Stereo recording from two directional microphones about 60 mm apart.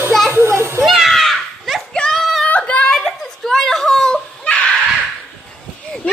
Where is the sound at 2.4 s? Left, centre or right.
Left.